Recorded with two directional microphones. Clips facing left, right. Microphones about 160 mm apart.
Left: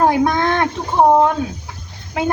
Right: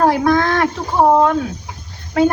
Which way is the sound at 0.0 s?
20° left (ahead or behind).